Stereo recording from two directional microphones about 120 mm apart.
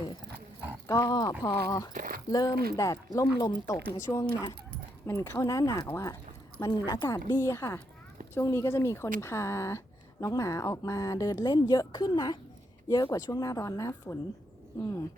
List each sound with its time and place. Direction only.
0.9 s a woman's voice: 30° left (ahead or behind)
4.0 s speech: 25° left (ahead or behind)
4.3 s a woman's voice: 35° left (ahead or behind)
5.0 s a woman's voice: 25° left (ahead or behind)